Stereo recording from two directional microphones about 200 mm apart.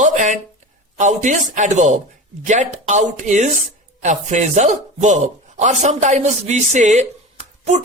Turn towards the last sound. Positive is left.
turn(degrees=-35)  # may be behind; listen again after turning